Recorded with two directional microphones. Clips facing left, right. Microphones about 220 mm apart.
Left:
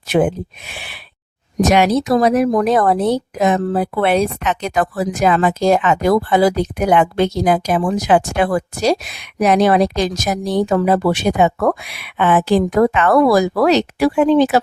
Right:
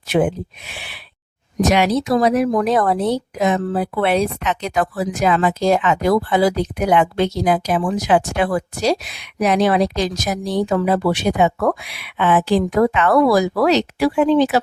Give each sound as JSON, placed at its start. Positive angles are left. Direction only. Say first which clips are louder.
{"t": 0.1, "sound": "speech", "louder": "left 2 dB", "side_deg": 50}